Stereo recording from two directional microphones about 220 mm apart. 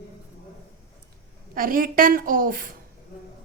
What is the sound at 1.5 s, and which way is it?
A woman's voice, 40° right (ahead or behind).